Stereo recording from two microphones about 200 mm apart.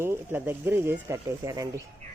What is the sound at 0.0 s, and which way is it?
Speech, 10° right (ahead or behind).